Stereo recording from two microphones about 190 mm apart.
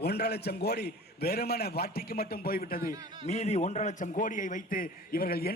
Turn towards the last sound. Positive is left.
turn(degrees=50)  # may be behind; listen again after turning